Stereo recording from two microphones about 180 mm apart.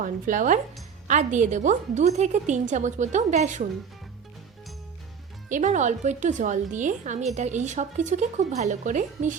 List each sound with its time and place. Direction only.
0.0 s a woman's voice: 45° right (ahead or behind)
5.5 s a woman's voice: 45° right (ahead or behind)